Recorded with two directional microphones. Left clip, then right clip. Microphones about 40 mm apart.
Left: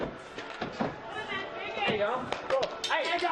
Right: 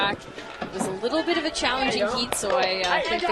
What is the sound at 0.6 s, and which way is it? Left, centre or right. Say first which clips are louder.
Speech: right 8 dB; centre.